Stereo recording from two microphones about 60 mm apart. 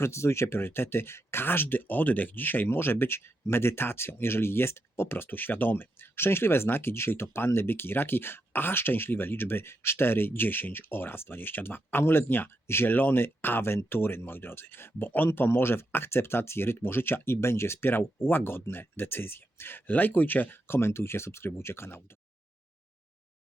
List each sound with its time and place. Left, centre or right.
0.0 s speech: left